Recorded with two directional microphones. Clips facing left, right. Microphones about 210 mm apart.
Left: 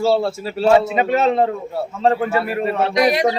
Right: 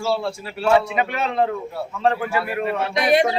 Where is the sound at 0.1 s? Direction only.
25° left (ahead or behind).